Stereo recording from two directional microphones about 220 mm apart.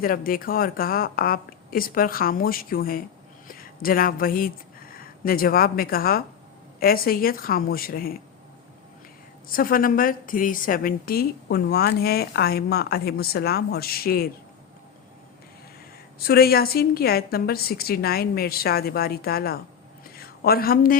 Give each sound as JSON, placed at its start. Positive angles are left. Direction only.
{"t": 0.0, "sound": "speech", "side_deg": 40}
{"t": 9.5, "sound": "a woman's voice", "side_deg": 40}
{"t": 16.1, "sound": "a woman's voice", "side_deg": 45}